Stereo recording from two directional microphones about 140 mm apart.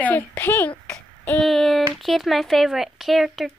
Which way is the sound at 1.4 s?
Centre (ahead or behind).